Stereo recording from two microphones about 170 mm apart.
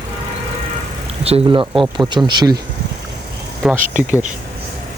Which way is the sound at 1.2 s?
35° right (ahead or behind).